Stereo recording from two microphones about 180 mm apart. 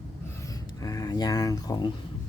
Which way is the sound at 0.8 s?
20° left (ahead or behind).